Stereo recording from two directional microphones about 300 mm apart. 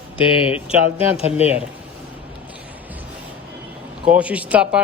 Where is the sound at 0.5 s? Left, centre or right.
Centre.